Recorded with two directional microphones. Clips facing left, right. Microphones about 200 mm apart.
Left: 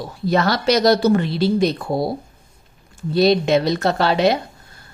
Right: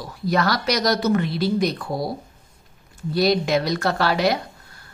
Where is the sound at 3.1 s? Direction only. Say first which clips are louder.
Left 4 dB; 25° left (ahead or behind).